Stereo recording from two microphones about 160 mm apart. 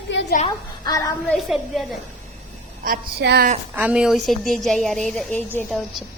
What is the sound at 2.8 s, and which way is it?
Speech, 85° right.